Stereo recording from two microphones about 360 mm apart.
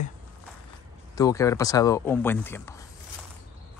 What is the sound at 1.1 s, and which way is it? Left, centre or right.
Speech, centre.